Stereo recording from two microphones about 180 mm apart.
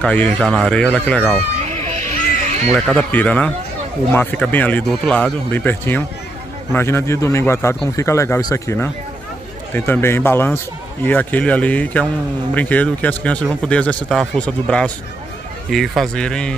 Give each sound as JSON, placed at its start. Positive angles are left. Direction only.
{"t": 0.0, "sound": "speech", "side_deg": 5}
{"t": 1.9, "sound": "children playing", "side_deg": -40}
{"t": 2.7, "sound": "speech", "side_deg": 5}